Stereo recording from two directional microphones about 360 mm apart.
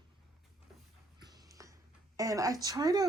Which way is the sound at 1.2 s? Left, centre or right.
Centre.